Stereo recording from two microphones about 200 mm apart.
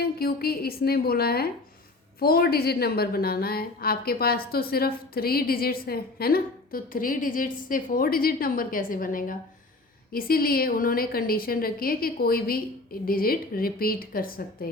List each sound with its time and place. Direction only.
0.0 s a woman's voice: 50° left (ahead or behind)